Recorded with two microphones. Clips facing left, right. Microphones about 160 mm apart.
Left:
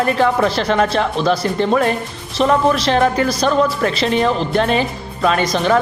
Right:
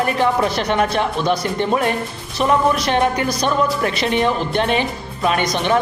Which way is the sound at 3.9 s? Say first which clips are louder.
Left 2 dB; 30° left (ahead or behind).